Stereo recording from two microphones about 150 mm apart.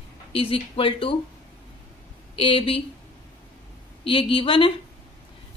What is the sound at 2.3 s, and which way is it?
Speech, 35° left (ahead or behind).